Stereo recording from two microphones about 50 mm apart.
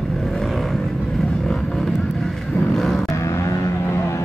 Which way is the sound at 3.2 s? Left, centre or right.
Left.